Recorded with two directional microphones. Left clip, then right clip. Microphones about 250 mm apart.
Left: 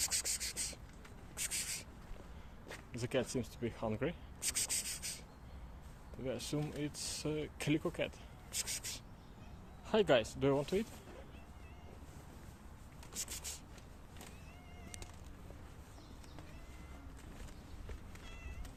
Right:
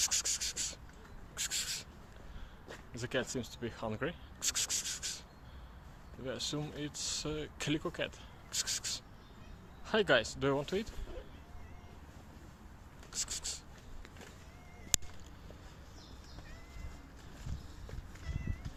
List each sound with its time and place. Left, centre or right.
0.0 s sanding: centre
1.4 s a sound: centre
2.9 s speech: centre
6.2 s speech: centre